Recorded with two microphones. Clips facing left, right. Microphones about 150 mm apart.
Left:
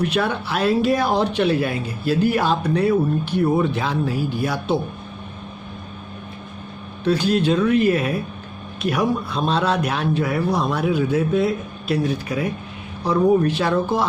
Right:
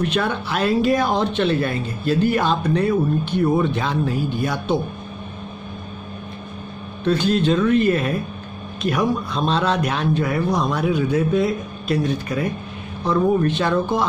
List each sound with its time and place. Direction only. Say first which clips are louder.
0.0 s speech: even; 5° left (ahead or behind)
7.1 s speech: even; 5° left (ahead or behind)